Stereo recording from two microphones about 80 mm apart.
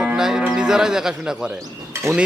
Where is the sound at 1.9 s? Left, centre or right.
Right.